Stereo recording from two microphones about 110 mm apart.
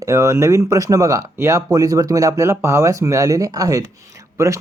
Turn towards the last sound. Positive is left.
turn(degrees=-25)  # may be behind; listen again after turning